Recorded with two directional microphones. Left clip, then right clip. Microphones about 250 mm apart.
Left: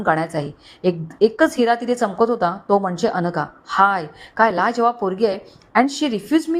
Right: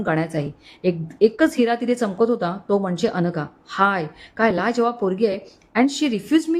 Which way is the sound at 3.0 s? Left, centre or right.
Centre.